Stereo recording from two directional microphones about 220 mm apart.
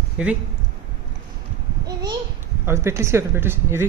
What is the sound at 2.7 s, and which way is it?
Speech, 10° right (ahead or behind).